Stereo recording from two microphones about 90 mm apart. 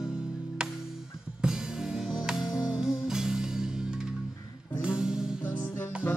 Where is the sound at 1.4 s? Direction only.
5° right (ahead or behind).